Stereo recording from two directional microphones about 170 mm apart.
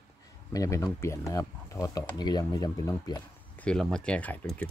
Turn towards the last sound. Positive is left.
turn(degrees=10)  # may be behind; listen again after turning